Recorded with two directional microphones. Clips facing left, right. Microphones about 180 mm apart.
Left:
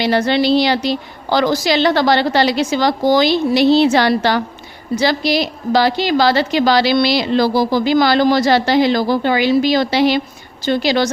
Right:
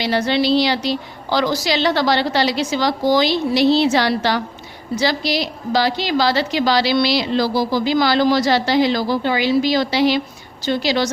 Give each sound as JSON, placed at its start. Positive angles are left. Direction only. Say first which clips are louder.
{"t": 0.0, "sound": "a woman's voice", "louder": "left 3 dB", "side_deg": 55}